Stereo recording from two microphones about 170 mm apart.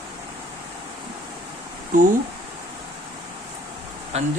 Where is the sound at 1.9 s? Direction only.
50° right (ahead or behind).